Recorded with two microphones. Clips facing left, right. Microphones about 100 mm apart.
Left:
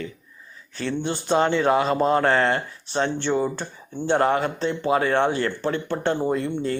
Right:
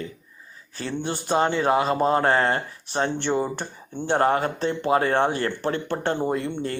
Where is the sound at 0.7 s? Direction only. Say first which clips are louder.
Left 2 dB; 40° right (ahead or behind).